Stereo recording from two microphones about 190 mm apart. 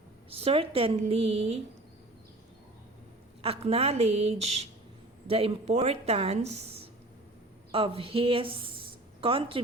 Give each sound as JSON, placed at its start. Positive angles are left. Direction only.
{"t": 0.3, "sound": "a woman's voice", "side_deg": -30}
{"t": 3.4, "sound": "a woman's voice", "side_deg": -30}